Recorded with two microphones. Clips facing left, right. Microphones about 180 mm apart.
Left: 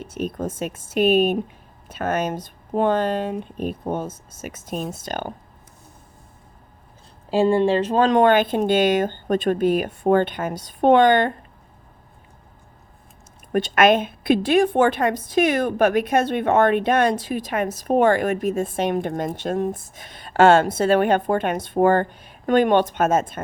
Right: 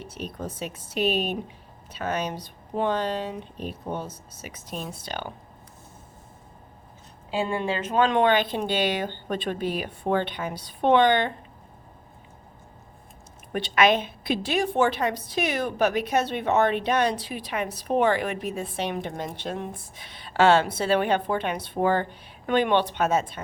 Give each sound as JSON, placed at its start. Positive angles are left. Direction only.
{"t": 0.0, "sound": "a woman's voice", "side_deg": 50}
{"t": 7.3, "sound": "a woman's voice", "side_deg": 30}
{"t": 13.5, "sound": "a woman's voice", "side_deg": 45}